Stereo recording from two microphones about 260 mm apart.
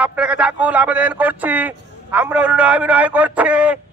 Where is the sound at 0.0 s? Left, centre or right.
Centre.